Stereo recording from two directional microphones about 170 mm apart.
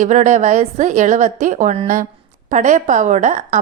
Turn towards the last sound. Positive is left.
turn(degrees=-45)  # may be behind; listen again after turning